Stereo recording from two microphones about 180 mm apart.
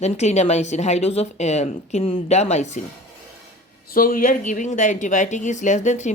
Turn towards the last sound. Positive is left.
turn(degrees=40)  # may be behind; listen again after turning